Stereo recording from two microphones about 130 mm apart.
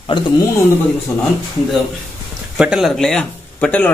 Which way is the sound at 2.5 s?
5° right (ahead or behind).